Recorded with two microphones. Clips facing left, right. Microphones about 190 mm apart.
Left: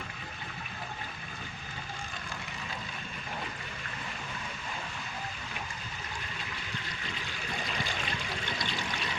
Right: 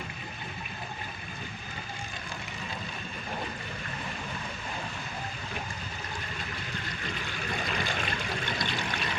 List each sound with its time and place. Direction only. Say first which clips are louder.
7.7 s pour: right 3 dB; 55° right (ahead or behind)